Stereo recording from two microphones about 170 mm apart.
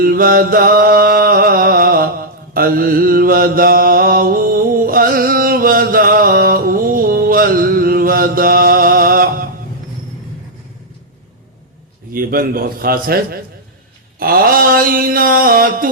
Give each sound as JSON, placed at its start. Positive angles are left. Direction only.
{"t": 0.0, "sound": "music", "side_deg": -60}
{"t": 12.1, "sound": "mantra", "side_deg": -60}